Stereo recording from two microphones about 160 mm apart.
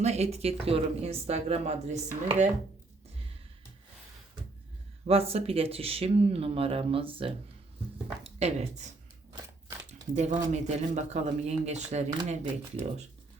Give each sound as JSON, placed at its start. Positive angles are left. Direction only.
{"t": 0.0, "sound": "speech", "side_deg": -45}
{"t": 5.0, "sound": "speech", "side_deg": -40}
{"t": 10.2, "sound": "speech", "side_deg": -45}